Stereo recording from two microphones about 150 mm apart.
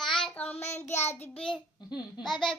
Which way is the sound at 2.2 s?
5° left (ahead or behind).